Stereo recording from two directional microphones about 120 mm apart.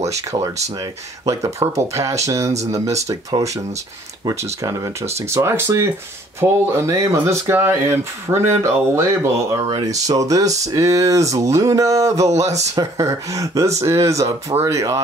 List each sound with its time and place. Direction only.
1.2 s speech: 25° right (ahead or behind)